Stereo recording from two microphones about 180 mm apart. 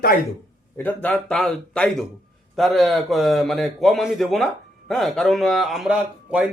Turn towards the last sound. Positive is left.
turn(degrees=-5)  # may be behind; listen again after turning